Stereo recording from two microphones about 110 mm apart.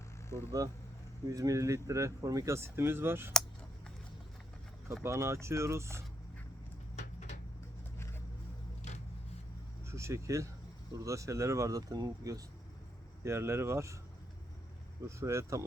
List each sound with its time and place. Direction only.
0.3 s speech: 25° left (ahead or behind)
1.3 s speech: 30° right (ahead or behind)
5.0 s speech: 25° right (ahead or behind)
9.8 s speech: 25° right (ahead or behind)
13.2 s speech: 25° right (ahead or behind)
15.0 s speech: 25° right (ahead or behind)